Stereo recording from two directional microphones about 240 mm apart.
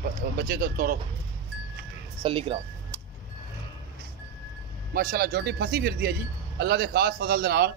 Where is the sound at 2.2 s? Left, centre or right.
Right.